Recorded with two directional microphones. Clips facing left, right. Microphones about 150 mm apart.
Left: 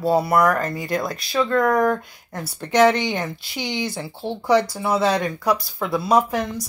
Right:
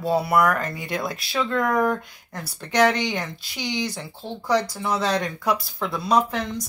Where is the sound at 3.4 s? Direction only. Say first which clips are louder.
Left 1 dB; 55° left (ahead or behind).